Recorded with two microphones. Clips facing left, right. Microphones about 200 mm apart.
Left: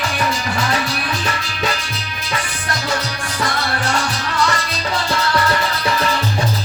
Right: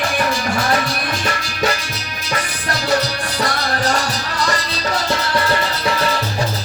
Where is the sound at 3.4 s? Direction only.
40° right (ahead or behind).